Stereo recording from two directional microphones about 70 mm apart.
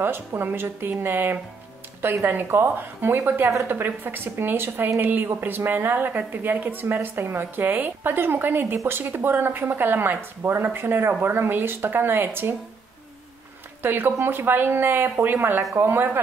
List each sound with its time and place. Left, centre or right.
0.0 s a woman's voice: right
13.8 s speech: right